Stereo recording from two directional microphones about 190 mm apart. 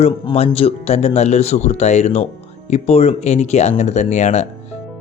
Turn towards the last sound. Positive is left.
turn(degrees=35)  # may be behind; listen again after turning